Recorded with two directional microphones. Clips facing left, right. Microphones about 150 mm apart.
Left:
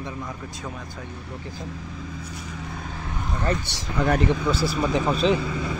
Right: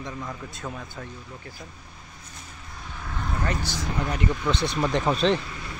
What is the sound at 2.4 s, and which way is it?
Vehicle, 90° left.